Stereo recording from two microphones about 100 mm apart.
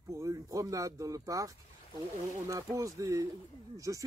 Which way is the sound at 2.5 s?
30° right (ahead or behind).